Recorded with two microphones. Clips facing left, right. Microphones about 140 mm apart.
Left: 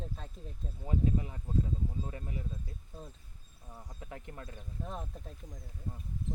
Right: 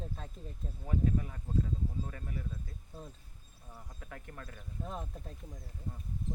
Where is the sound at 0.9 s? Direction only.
20° left (ahead or behind).